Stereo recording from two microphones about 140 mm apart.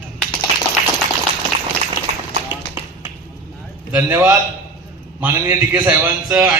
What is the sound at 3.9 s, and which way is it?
A man's voice, 15° right (ahead or behind).